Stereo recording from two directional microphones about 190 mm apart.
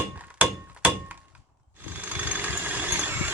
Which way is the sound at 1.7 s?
10° right (ahead or behind).